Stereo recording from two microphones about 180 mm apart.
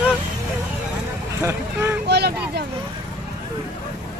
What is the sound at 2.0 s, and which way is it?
Speech, 65° right (ahead or behind).